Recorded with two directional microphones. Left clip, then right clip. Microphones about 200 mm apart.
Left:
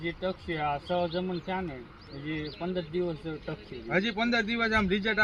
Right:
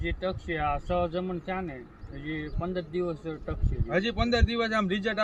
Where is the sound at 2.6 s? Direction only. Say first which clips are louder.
Right 1 dB; 5° left (ahead or behind).